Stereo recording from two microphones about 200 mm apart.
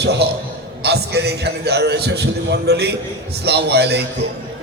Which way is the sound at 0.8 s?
55° right (ahead or behind).